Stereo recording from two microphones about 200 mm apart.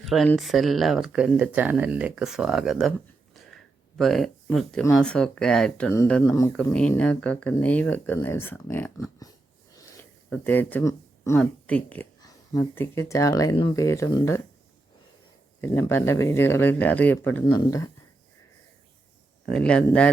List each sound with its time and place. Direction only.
0.0 s speech: centre (ahead or behind)
9.7 s a sound: 15° left (ahead or behind)
10.2 s speech: 10° left (ahead or behind)
15.6 s speech: 10° left (ahead or behind)
19.5 s speech: 5° left (ahead or behind)